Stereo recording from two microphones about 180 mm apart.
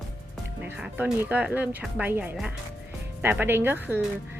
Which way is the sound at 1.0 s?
10° right (ahead or behind).